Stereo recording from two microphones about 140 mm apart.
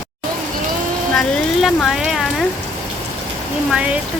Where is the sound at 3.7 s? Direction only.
10° right (ahead or behind).